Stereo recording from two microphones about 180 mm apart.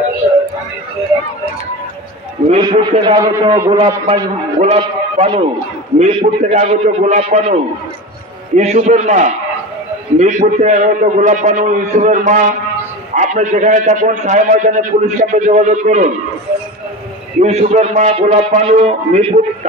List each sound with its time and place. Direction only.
2.6 s a man's voice: 25° right (ahead or behind)
8.5 s a man's voice: 40° right (ahead or behind)
17.4 s a man's voice: 35° right (ahead or behind)